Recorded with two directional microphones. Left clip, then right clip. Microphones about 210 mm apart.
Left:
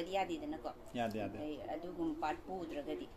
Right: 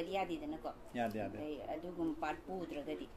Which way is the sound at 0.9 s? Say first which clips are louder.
Even; 20° left (ahead or behind).